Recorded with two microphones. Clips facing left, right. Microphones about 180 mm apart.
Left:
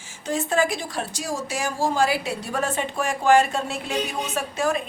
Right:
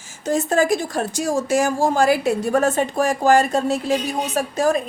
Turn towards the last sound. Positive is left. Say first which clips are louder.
# right 5 dB
turn(degrees=-40)  # may be behind; listen again after turning